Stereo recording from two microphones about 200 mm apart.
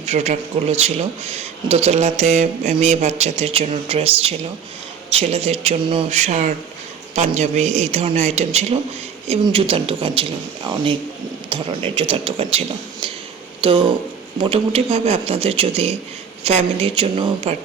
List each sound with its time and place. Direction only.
0.0 s speech: 35° right (ahead or behind)